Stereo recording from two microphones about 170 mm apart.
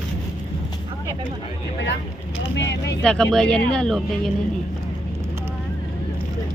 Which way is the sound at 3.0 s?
5° left (ahead or behind).